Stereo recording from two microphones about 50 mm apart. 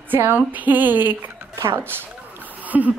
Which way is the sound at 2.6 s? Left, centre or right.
Right.